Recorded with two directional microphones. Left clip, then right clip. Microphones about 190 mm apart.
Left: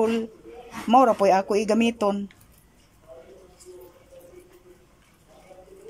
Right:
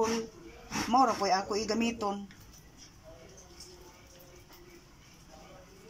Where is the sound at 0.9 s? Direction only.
60° left (ahead or behind).